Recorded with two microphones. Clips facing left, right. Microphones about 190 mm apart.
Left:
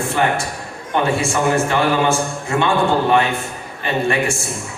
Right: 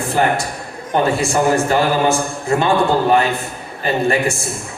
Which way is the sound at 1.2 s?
35° right (ahead or behind).